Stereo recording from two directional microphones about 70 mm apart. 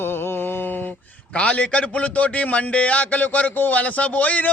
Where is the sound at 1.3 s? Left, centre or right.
Centre.